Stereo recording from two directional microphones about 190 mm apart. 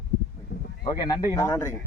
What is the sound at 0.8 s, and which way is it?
Speech, 20° left (ahead or behind).